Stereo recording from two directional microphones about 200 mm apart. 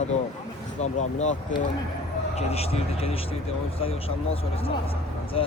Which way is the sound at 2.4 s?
30° left (ahead or behind).